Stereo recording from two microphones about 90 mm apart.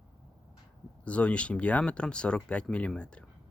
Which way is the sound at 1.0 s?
15° left (ahead or behind).